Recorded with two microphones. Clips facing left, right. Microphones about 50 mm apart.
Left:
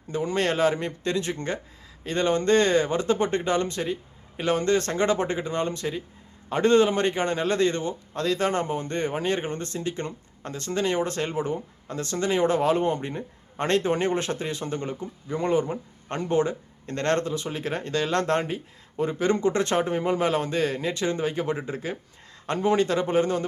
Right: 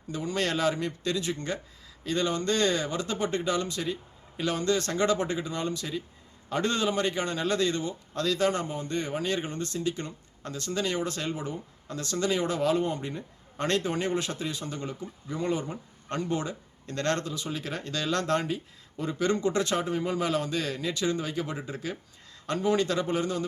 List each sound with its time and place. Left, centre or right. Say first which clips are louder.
0.1 s a man's voice: left 4 dB; left